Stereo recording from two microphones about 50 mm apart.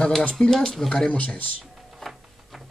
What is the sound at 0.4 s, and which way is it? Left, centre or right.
Speech, centre.